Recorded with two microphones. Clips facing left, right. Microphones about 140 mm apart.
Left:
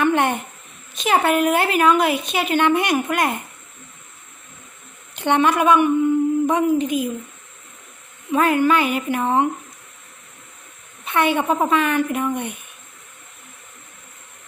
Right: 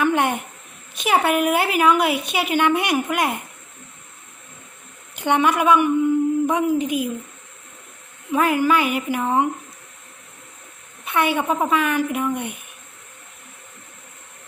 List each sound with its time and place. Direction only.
0.0 s a sound: 10° right (ahead or behind)
0.9 s a woman's voice: 10° right (ahead or behind)
5.1 s a woman's voice: 10° right (ahead or behind)
8.3 s a woman's voice: 5° right (ahead or behind)
11.0 s a woman's voice: 10° right (ahead or behind)